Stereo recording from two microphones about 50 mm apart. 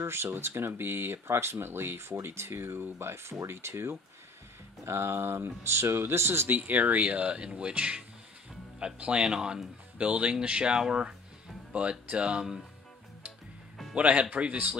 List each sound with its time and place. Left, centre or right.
0.0 s speech: right
6.6 s speech: right; by 11.1 s centre
11.7 s speech: right
13.9 s speech: right